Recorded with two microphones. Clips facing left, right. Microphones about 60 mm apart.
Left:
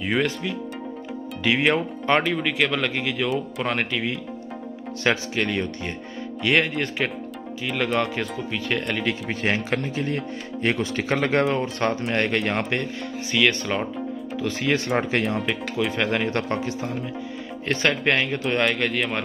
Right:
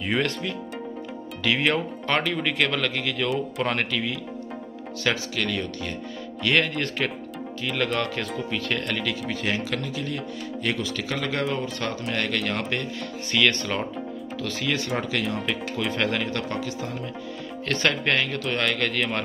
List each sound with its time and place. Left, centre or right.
0.0 s speech: centre
2.2 s speech: centre
2.9 s speech: centre
3.3 s speech: centre
3.9 s a man's voice: centre
6.4 s speech: centre
9.0 s a man's voice: left
13.3 s speech: centre
14.4 s a man's voice: left
15.9 s speech: centre
16.3 s speech: left
17.6 s a man's voice: centre
18.7 s speech: centre